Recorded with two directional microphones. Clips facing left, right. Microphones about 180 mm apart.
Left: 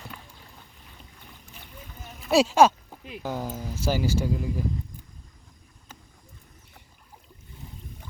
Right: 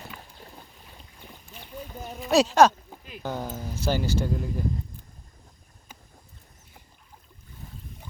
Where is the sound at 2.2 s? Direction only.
5° left (ahead or behind).